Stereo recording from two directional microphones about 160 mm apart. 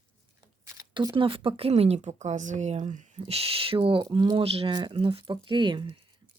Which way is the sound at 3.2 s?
35° right (ahead or behind).